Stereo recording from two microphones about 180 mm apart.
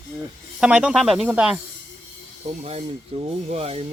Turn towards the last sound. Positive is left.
turn(degrees=-35)  # may be behind; listen again after turning